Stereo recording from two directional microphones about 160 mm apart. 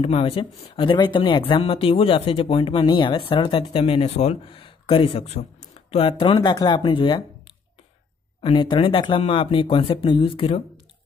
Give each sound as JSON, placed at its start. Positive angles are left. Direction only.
{"t": 0.0, "sound": "speech", "side_deg": 40}
{"t": 3.8, "sound": "speech", "side_deg": 40}
{"t": 8.4, "sound": "speech", "side_deg": 30}